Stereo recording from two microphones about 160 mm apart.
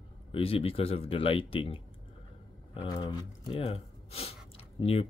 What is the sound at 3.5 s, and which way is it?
Speech, 40° left (ahead or behind).